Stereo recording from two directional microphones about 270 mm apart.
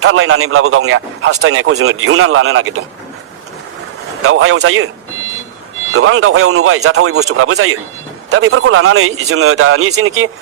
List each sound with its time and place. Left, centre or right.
0.0 s speech: right
4.2 s speech: right
5.9 s speech: right